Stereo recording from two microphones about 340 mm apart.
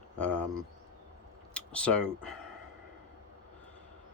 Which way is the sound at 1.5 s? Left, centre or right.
Centre.